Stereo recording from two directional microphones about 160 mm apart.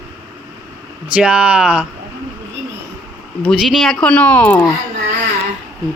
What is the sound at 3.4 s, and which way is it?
Speech, centre (ahead or behind).